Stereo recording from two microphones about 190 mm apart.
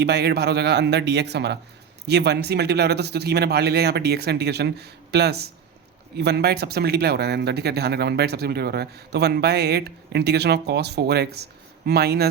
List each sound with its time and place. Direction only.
0.0 s speech: 60° right (ahead or behind)